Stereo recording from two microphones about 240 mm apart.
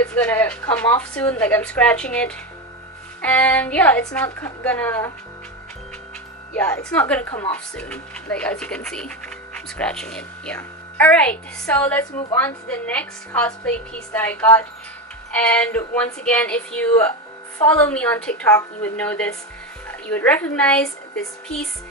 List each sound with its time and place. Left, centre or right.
0.0 s a woman's voice: centre
6.5 s a woman's voice: centre